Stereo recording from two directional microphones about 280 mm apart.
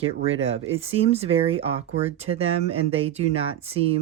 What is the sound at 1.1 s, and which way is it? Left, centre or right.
Speech, right.